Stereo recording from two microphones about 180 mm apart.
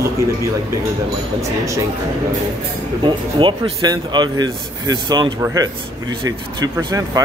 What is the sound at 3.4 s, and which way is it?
Speech, 25° right (ahead or behind).